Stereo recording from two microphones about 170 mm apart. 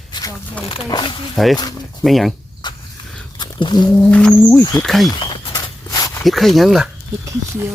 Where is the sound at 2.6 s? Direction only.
25° left (ahead or behind).